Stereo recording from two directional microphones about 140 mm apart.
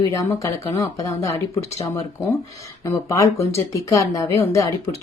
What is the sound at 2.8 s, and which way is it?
A woman's voice, 20° left (ahead or behind).